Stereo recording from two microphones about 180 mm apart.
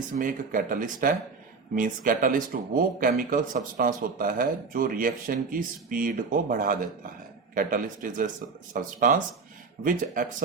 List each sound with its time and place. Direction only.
0.2 s speech: 50° right (ahead or behind)